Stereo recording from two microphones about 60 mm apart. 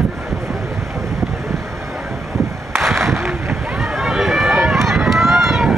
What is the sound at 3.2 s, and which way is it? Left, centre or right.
Boat, right.